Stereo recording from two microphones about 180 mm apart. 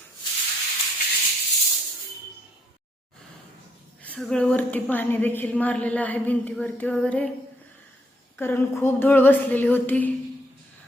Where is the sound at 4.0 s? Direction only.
5° left (ahead or behind).